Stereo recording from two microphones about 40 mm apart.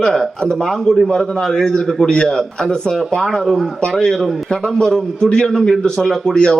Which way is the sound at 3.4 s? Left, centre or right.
Centre.